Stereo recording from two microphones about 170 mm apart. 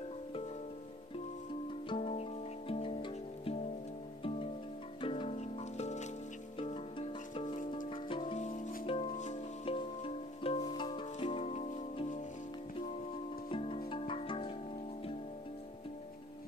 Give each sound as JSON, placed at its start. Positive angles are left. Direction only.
{"t": 1.9, "sound": "music", "side_deg": 35}
{"t": 5.0, "sound": "music", "side_deg": 30}
{"t": 9.2, "sound": "music", "side_deg": 45}
{"t": 9.8, "sound": "music", "side_deg": 30}
{"t": 13.5, "sound": "music", "side_deg": 30}